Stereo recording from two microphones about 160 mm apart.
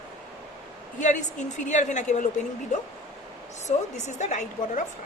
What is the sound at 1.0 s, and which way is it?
A woman's voice, 50° left (ahead or behind).